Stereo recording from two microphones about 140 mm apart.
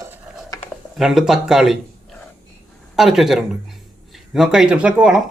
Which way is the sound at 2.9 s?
Centre (ahead or behind).